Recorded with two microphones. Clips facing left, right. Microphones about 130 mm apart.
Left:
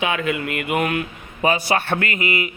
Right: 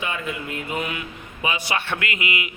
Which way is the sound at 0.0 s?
80° left.